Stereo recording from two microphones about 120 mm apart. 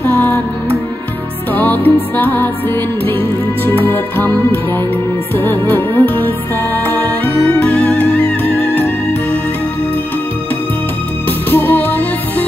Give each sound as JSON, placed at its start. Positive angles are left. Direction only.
{"t": 0.0, "sound": "music", "side_deg": 20}
{"t": 1.5, "sound": "music", "side_deg": 15}
{"t": 11.2, "sound": "music", "side_deg": 15}